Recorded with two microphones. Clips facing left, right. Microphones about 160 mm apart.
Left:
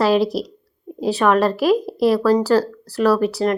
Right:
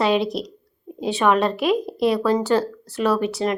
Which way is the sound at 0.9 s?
Centre (ahead or behind).